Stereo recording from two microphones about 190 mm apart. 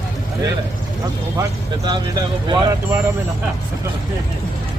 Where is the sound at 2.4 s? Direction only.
25° right (ahead or behind).